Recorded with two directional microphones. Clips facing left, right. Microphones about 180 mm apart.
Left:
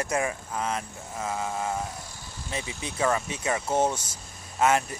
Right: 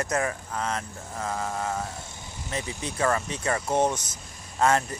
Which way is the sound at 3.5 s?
5° left (ahead or behind).